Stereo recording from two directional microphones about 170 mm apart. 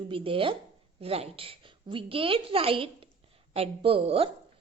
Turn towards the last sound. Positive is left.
turn(degrees=-35)  # may be behind; listen again after turning